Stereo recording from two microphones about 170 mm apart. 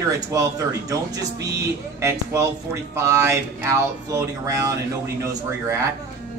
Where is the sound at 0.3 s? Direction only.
20° right (ahead or behind).